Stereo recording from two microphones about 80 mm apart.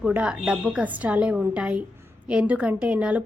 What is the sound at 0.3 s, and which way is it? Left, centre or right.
A woman's voice, centre.